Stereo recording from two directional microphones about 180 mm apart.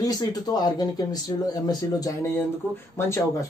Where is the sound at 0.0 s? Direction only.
20° left (ahead or behind).